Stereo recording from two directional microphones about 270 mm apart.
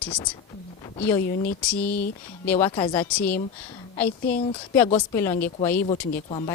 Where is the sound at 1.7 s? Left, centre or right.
Centre.